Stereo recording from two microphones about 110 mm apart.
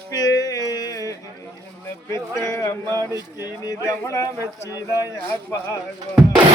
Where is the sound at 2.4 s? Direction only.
30° left (ahead or behind).